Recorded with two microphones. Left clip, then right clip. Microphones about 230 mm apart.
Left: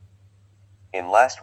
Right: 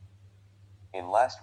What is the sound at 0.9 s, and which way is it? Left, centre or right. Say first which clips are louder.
Speech: left 8 dB; left.